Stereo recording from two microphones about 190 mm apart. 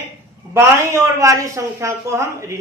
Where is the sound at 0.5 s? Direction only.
15° right (ahead or behind).